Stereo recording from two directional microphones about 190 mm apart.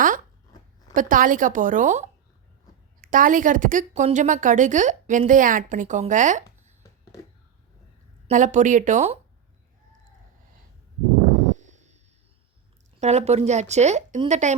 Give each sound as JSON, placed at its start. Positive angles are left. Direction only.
{"t": 0.9, "sound": "a woman's voice", "side_deg": -45}
{"t": 8.3, "sound": "speech", "side_deg": -40}
{"t": 11.4, "sound": "a sound", "side_deg": -40}
{"t": 13.0, "sound": "speech", "side_deg": -35}